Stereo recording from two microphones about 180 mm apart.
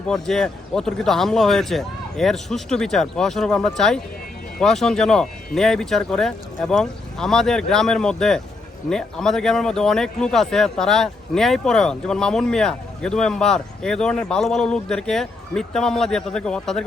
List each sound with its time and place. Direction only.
0.1 s speech: centre (ahead or behind)